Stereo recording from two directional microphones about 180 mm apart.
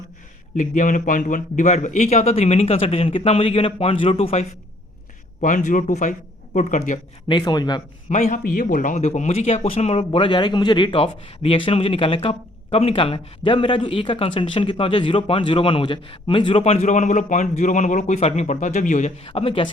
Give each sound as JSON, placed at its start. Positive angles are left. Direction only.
{"t": 0.5, "sound": "speech", "side_deg": 45}
{"t": 7.3, "sound": "a man's voice", "side_deg": 25}
{"t": 8.1, "sound": "speech", "side_deg": 45}
{"t": 19.3, "sound": "speech", "side_deg": 30}